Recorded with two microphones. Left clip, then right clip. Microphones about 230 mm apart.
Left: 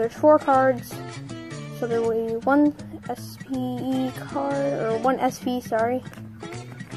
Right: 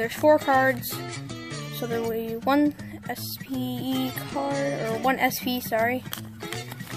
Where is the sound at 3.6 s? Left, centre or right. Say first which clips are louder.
Left 3 dB; right.